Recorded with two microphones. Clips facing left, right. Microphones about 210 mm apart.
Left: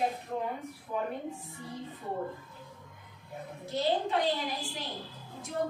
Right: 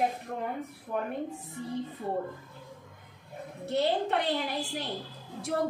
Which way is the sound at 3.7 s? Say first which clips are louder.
Right 2 dB; 65° right (ahead or behind).